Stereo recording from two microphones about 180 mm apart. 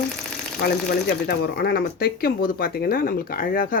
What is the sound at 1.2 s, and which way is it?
Speech, 60° left (ahead or behind).